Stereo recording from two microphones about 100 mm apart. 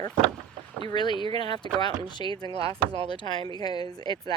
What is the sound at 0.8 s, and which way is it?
Speech, 50° left (ahead or behind).